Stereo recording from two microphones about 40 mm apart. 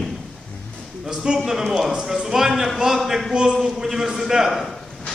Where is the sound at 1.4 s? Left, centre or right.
Centre.